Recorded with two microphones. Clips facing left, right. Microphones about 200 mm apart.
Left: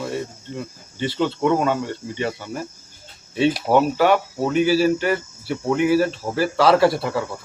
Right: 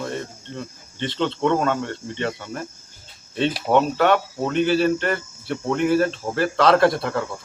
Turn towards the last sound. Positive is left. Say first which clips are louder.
# left 1 dB
turn(degrees=5)  # may be behind; listen again after turning